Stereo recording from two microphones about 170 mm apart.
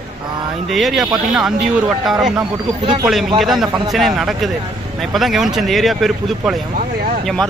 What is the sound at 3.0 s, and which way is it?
Speech, centre (ahead or behind).